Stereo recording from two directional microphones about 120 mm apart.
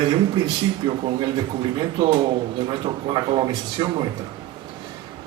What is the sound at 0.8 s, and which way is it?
Speech, 40° right (ahead or behind).